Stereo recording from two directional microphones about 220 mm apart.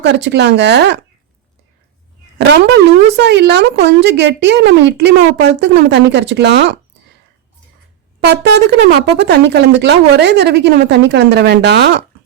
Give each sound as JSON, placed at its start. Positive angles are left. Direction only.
{"t": 0.0, "sound": "speech", "side_deg": -50}
{"t": 3.2, "sound": "speech", "side_deg": -50}
{"t": 8.2, "sound": "speech", "side_deg": -50}